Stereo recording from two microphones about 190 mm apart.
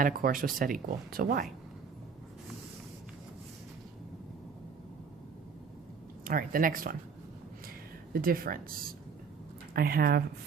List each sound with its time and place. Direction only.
0.0 s speech: 50° right (ahead or behind)
6.2 s speech: 50° right (ahead or behind)
8.1 s speech: 50° right (ahead or behind)
9.7 s speech: 50° right (ahead or behind)